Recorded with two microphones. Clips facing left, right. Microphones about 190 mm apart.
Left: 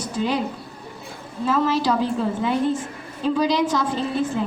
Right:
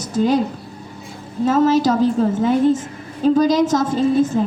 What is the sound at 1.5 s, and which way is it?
A woman's voice, 40° right (ahead or behind).